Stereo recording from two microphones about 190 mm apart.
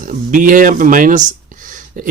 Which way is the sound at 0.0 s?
45° right (ahead or behind).